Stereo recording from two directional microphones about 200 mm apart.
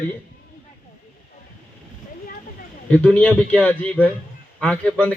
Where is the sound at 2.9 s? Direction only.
5° left (ahead or behind).